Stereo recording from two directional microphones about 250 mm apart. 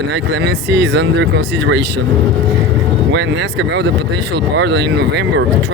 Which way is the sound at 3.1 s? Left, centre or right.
Right.